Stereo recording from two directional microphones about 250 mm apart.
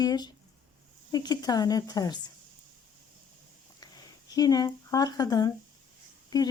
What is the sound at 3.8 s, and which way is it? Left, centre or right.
Speech, centre.